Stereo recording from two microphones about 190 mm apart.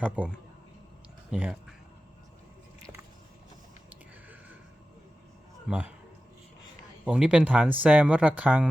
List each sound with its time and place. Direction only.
0.0 s speech: 10° right (ahead or behind)
5.6 s speech: 5° right (ahead or behind)
7.0 s speech: 5° right (ahead or behind)